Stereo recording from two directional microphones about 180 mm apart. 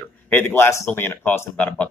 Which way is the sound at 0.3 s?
10° left (ahead or behind).